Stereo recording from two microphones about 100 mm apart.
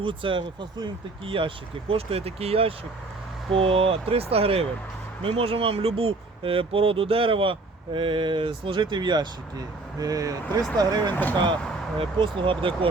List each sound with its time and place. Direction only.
0.0 s speech: 60° right (ahead or behind); by 11.1 s 40° right (ahead or behind)
11.1 s speech: 15° left (ahead or behind)
11.9 s speech: 55° right (ahead or behind)